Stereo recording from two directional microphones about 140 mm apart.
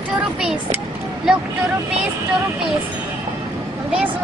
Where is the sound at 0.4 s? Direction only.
5° right (ahead or behind).